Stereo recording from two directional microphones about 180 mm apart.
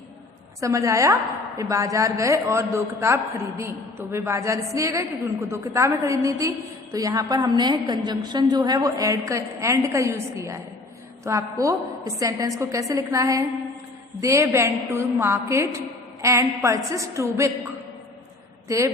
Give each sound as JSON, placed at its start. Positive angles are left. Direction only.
{"t": 0.6, "sound": "a woman's voice", "side_deg": -15}
{"t": 18.7, "sound": "a woman's voice", "side_deg": -15}